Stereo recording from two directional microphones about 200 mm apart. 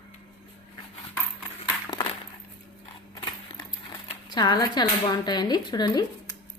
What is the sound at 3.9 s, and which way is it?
Speech, 20° left (ahead or behind).